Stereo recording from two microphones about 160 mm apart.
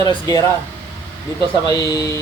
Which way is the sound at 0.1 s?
25° left (ahead or behind).